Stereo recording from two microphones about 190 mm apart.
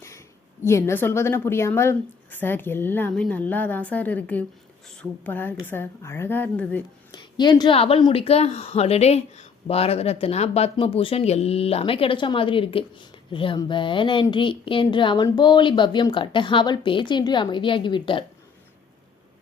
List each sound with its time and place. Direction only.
0.6 s a woman's voice: 15° left (ahead or behind)
7.1 s a woman's voice: 25° left (ahead or behind)